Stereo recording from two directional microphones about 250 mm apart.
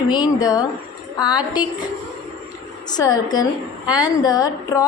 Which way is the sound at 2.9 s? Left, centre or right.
Centre.